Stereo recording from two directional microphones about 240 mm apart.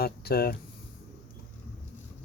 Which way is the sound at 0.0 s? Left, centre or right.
Left.